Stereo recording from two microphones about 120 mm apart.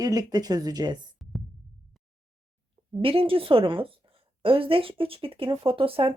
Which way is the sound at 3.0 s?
50° right (ahead or behind).